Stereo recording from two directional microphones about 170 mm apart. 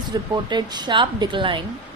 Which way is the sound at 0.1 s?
25° right (ahead or behind).